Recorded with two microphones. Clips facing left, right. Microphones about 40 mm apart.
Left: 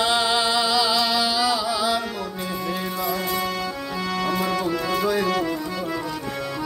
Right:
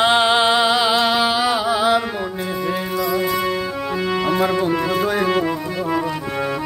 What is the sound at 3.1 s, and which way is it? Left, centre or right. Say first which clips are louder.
Music: right 5 dB; right.